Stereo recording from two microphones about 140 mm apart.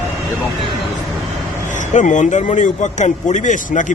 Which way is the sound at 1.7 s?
60° left (ahead or behind).